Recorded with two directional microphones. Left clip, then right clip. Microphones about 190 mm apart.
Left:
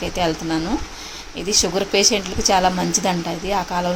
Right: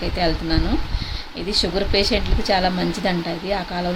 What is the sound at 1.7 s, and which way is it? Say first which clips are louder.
A woman's voice: left 3 dB; 5° left (ahead or behind).